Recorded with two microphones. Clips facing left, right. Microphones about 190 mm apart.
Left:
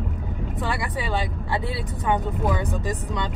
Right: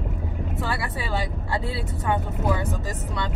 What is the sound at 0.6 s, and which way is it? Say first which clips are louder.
Speech: left 2 dB; 20° left (ahead or behind).